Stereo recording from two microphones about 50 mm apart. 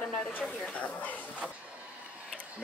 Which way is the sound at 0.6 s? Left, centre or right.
Left.